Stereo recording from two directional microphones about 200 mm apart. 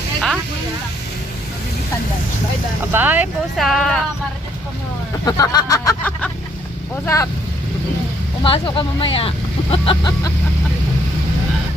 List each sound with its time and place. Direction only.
2.9 s speech: 10° right (ahead or behind)
5.2 s speech: 20° left (ahead or behind)
8.4 s speech: 25° left (ahead or behind)